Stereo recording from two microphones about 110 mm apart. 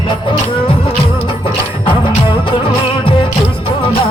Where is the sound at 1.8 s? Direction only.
50° left (ahead or behind).